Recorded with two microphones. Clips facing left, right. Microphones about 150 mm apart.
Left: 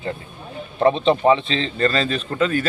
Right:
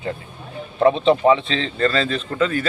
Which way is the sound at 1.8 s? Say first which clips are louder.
Right 1 dB; 45° left (ahead or behind).